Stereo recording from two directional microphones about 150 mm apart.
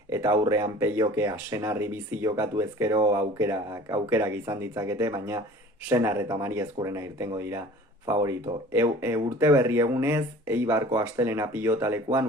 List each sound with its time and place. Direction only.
0.1 s speech: 20° right (ahead or behind)